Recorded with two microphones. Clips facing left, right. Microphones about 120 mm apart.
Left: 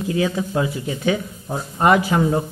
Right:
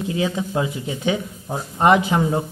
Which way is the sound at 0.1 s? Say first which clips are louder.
Left 2 dB; 20° right (ahead or behind).